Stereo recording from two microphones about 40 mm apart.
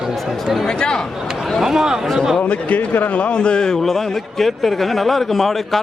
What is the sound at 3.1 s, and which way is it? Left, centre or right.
Speech, left.